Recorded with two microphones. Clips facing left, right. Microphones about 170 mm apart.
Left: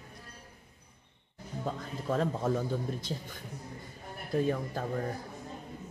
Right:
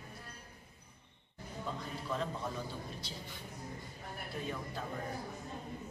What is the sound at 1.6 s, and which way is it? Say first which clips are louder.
A man's voice: left 6 dB; 50° left (ahead or behind).